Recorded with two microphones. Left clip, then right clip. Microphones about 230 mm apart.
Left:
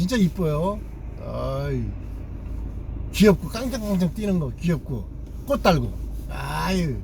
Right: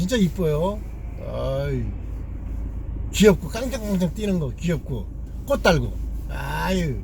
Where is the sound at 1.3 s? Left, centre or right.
Centre.